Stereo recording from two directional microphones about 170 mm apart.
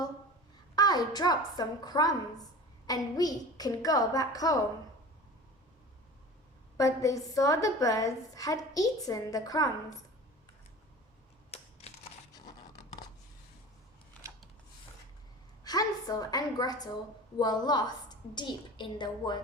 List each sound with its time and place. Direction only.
0.8 s a woman's voice: 25° left (ahead or behind)
6.7 s a woman's voice: 20° left (ahead or behind)
15.6 s a woman's voice: 25° left (ahead or behind)